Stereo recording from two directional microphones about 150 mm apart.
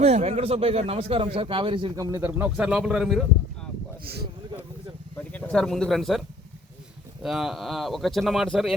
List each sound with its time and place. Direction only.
0.0 s speech: 45° right (ahead or behind); by 3.2 s centre (ahead or behind)
4.0 s speech: 90° right
5.3 s speech: 10° left (ahead or behind)